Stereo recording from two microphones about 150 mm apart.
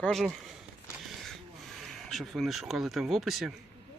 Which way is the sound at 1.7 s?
Centre (ahead or behind).